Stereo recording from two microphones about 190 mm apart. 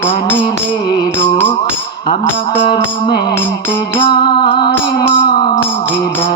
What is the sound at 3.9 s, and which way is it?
Music, 25° left (ahead or behind).